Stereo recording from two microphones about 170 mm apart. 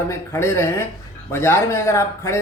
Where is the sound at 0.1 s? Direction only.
15° left (ahead or behind).